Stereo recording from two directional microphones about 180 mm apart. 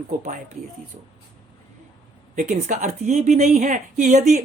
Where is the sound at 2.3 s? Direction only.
45° right (ahead or behind).